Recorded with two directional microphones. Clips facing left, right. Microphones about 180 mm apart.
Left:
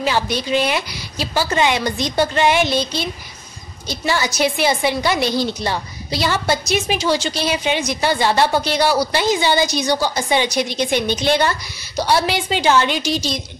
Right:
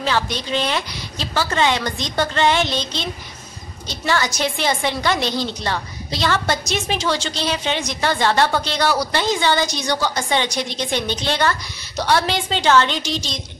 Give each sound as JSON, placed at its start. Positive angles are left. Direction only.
{"t": 0.0, "sound": "a woman's voice", "side_deg": 10}